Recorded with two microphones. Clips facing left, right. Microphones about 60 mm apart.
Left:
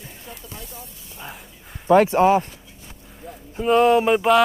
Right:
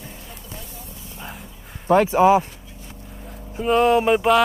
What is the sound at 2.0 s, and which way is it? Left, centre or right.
Speech, centre.